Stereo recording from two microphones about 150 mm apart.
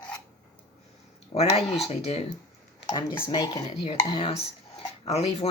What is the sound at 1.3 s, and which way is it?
Speech, 40° left (ahead or behind).